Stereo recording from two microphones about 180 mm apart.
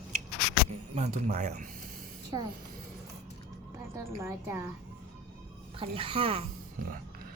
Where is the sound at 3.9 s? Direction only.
15° right (ahead or behind).